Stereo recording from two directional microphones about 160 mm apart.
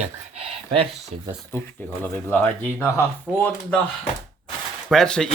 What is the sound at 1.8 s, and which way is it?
Speech, 10° left (ahead or behind).